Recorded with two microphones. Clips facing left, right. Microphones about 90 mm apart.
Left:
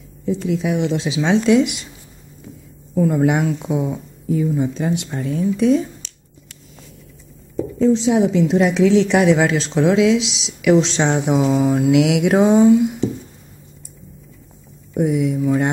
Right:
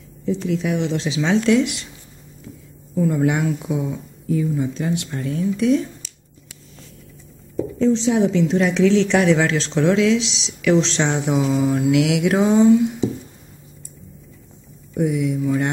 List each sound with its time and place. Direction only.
0.2 s a woman's voice: 10° left (ahead or behind)
3.0 s a woman's voice: 20° left (ahead or behind)
7.5 s a woman's voice: 5° left (ahead or behind)
11.7 s mantra: 20° left (ahead or behind)
15.0 s mantra: 20° left (ahead or behind)